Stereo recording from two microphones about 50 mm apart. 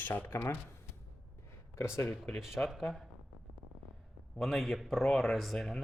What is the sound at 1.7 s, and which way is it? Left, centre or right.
Speech, left.